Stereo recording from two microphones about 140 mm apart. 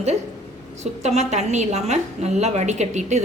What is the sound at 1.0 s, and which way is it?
A woman's voice, 55° right (ahead or behind).